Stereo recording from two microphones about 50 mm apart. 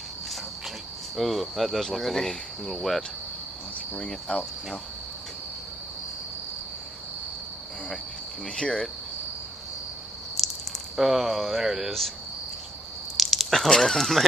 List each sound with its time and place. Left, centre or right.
1.1 s speech: centre
4.3 s speech: left
8.5 s speech: centre
10.4 s a sound: centre
11.0 s speech: centre
13.2 s a sound: centre
13.7 s speech: centre